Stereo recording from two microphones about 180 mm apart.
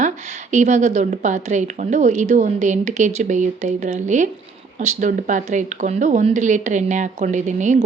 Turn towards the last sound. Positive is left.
turn(degrees=-45)  # may be behind; listen again after turning